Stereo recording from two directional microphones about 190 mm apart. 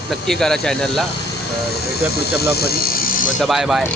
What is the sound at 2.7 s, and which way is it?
Speech, 55° left (ahead or behind).